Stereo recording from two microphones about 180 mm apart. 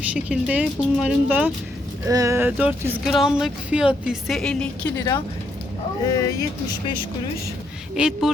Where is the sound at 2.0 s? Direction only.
20° right (ahead or behind); by 4.6 s 5° left (ahead or behind).